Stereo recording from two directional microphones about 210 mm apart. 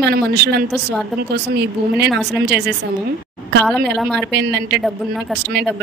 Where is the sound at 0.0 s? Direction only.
50° right (ahead or behind).